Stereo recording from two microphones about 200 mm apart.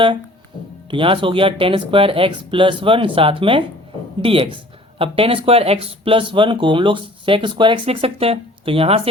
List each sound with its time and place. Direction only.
0.9 s speech: 25° right (ahead or behind)